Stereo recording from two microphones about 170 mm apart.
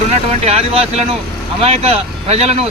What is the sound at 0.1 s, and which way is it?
Speech, 35° right (ahead or behind).